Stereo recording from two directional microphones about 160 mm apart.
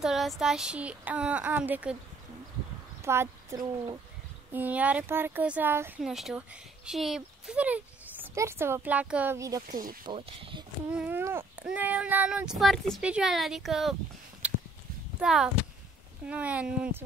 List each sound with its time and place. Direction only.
0.0 s speech: centre (ahead or behind)
3.0 s speech: 15° right (ahead or behind)
6.0 s speech: centre (ahead or behind); by 9.6 s 15° right (ahead or behind)
9.7 s speech: 60° right (ahead or behind)
10.0 s speech: 35° right (ahead or behind)
10.9 s speech: 10° right (ahead or behind)
14.4 s a sound: 10° right (ahead or behind)
15.1 s speech: 5° right (ahead or behind)